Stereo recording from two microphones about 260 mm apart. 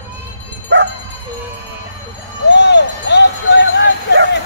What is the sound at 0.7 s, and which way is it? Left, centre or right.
Bow-wow, right.